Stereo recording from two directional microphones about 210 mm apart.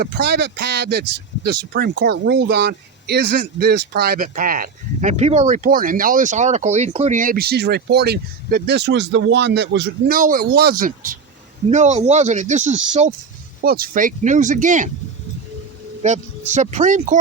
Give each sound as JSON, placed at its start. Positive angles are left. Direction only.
{"t": 0.0, "sound": "speech", "side_deg": -50}
{"t": 13.7, "sound": "speech", "side_deg": -45}
{"t": 16.0, "sound": "speech", "side_deg": -35}